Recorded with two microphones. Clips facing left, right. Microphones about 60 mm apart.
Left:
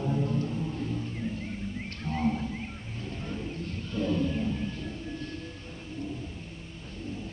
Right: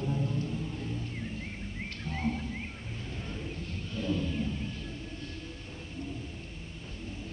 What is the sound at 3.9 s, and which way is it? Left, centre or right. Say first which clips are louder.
Wild animals: left 4 dB; left.